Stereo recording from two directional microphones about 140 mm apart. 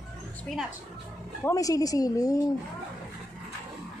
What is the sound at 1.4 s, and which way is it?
Speech, 25° left (ahead or behind).